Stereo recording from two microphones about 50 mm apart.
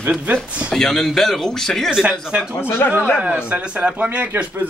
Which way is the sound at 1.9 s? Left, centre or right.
Centre.